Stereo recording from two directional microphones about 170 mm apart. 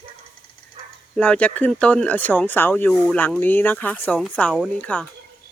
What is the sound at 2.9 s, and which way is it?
Speech, centre (ahead or behind).